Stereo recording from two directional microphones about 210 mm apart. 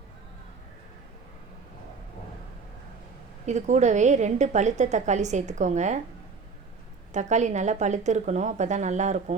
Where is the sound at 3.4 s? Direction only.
35° right (ahead or behind).